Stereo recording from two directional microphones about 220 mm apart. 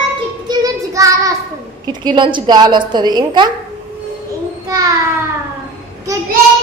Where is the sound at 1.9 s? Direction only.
20° right (ahead or behind).